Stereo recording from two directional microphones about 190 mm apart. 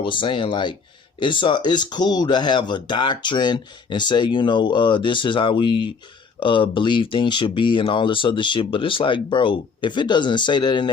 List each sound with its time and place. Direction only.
0.0 s speech: 25° left (ahead or behind)